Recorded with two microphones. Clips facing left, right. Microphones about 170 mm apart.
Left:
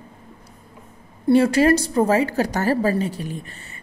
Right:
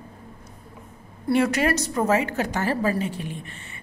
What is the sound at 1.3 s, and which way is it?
A woman's voice, 30° left (ahead or behind).